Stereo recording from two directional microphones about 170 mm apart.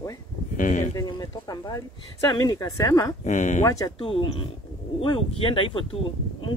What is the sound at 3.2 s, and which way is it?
Speech, 45° left (ahead or behind).